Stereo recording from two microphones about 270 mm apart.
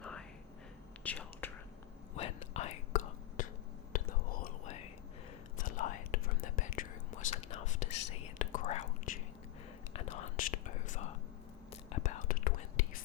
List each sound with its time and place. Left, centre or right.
0.0 s whispering: centre
2.1 s whispering: left